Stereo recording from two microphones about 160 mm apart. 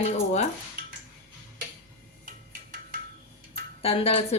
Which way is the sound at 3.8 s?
40° left (ahead or behind).